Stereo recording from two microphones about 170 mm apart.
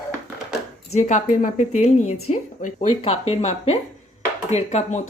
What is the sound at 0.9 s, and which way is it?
Speech, 45° left (ahead or behind).